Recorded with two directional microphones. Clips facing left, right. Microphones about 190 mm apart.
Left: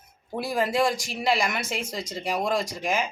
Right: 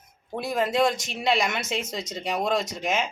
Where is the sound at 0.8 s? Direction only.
20° right (ahead or behind).